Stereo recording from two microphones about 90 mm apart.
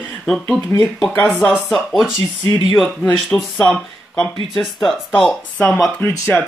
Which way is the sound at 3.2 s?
5° left (ahead or behind).